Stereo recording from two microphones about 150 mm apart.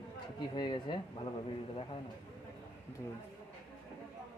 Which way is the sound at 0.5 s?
30° left (ahead or behind).